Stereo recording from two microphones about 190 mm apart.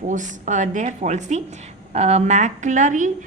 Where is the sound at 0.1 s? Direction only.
40° right (ahead or behind).